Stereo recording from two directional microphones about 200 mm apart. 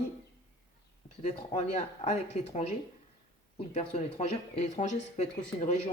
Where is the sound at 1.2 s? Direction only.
35° left (ahead or behind).